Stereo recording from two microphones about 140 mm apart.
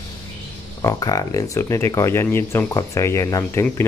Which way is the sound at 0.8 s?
25° left (ahead or behind).